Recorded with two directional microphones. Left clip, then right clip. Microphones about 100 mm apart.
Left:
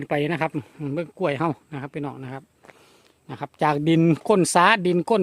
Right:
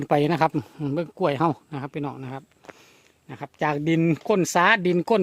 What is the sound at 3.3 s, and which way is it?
Speech, 25° left (ahead or behind).